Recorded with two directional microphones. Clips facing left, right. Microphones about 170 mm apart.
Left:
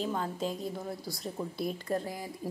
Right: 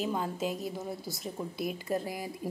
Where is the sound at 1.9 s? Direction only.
15° right (ahead or behind).